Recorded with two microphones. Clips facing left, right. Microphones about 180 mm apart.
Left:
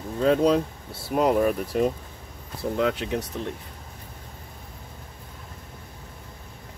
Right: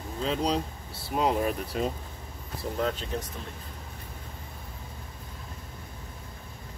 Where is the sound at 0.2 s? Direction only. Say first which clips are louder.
Left 8 dB; 55° left (ahead or behind).